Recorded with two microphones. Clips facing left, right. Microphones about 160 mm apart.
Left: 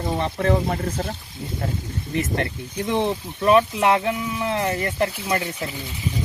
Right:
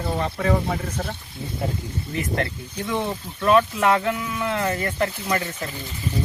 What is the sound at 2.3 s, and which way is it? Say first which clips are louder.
Speech: left 1 dB; 25° left (ahead or behind).